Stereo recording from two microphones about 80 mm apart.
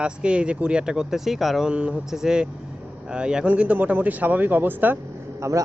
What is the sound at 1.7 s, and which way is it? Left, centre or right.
A man's voice, centre.